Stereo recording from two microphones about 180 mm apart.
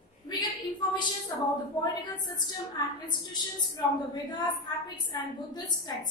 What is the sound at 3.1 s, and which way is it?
A woman's voice, 25° left (ahead or behind).